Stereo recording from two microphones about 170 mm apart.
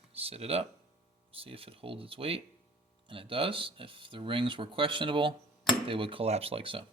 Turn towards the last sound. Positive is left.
turn(degrees=-30)  # may be behind; listen again after turning